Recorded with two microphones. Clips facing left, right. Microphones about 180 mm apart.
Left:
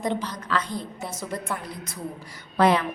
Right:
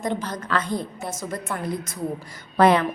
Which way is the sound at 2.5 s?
55° right (ahead or behind).